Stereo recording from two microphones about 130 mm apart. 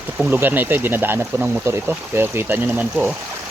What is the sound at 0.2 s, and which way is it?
Speech, 15° right (ahead or behind).